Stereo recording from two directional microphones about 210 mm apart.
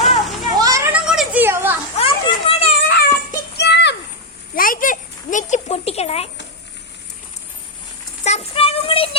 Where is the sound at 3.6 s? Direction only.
55° left (ahead or behind).